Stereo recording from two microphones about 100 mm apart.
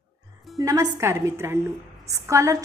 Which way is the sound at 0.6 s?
35° right (ahead or behind).